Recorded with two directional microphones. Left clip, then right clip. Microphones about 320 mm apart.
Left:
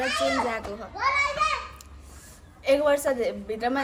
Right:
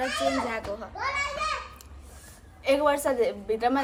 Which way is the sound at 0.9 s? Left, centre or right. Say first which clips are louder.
Left 6 dB; left.